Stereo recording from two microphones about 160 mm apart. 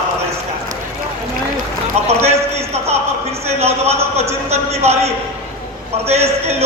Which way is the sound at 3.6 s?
40° right (ahead or behind).